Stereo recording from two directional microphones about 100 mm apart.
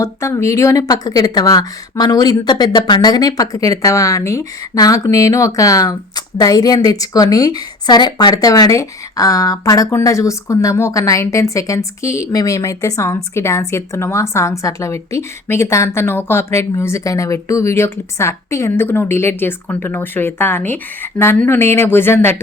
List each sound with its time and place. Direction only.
0.0 s a woman's voice: 30° left (ahead or behind)